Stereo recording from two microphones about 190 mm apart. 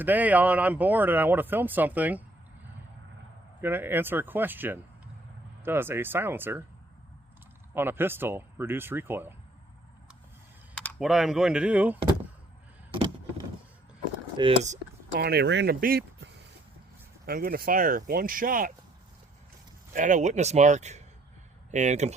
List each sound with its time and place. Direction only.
0.0 s speech: 10° right (ahead or behind)
3.6 s speech: 10° right (ahead or behind)
7.7 s speech: 10° right (ahead or behind)
10.8 s speech: centre (ahead or behind)
14.6 s a sound: 40° right (ahead or behind)
15.2 s speech: 55° right (ahead or behind)
19.9 s speech: 40° right (ahead or behind)